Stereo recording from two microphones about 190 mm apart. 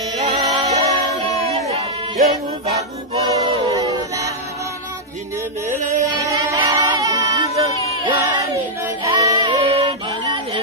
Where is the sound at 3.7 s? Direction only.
20° right (ahead or behind).